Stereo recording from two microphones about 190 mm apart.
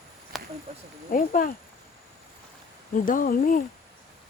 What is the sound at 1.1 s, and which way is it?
Speech, 50° left (ahead or behind).